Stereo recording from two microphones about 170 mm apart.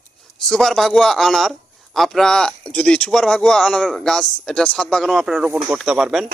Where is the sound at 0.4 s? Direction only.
Centre (ahead or behind).